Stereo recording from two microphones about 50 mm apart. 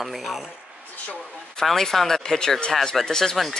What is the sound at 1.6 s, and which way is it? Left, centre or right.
Speech, centre.